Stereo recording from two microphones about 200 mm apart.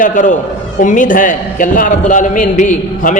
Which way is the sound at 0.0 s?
40° left (ahead or behind).